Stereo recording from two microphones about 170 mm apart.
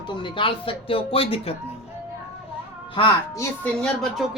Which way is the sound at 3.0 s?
20° left (ahead or behind).